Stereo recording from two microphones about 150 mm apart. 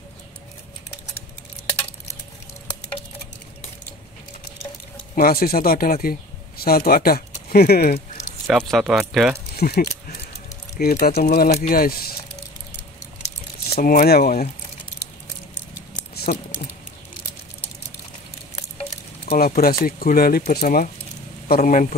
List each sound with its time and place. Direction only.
5.1 s speech: 70° left (ahead or behind); by 8.0 s 90° left
8.5 s speech: centre (ahead or behind)
9.6 s keys jangling: 90° left
10.8 s speech: 90° left
13.7 s speech: 80° left
19.2 s speech: 90° left; by 21.8 s 65° left (ahead or behind)